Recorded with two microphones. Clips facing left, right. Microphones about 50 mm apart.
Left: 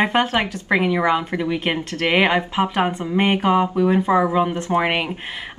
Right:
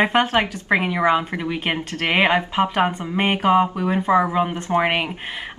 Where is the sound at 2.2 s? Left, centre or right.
Centre.